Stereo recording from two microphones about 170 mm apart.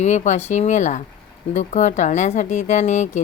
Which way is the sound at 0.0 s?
45° left (ahead or behind).